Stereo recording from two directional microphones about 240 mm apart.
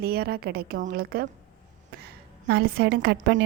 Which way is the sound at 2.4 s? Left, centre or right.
Right.